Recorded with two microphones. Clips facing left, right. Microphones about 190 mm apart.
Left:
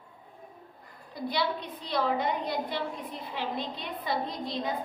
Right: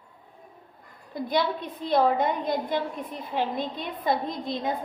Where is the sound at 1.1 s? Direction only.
50° right (ahead or behind).